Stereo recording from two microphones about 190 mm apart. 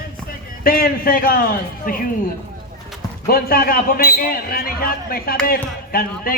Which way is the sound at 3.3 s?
50° left (ahead or behind).